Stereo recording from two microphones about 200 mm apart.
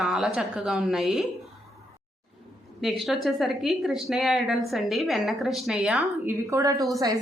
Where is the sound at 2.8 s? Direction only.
Centre (ahead or behind).